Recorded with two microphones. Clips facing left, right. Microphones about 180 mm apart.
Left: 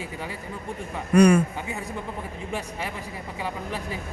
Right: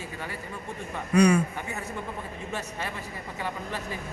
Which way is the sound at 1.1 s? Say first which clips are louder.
Left 4 dB; 55° left (ahead or behind).